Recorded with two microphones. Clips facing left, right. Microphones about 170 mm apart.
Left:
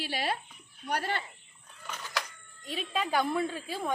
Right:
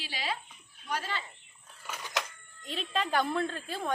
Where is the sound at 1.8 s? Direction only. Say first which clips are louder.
Even; 10° right (ahead or behind).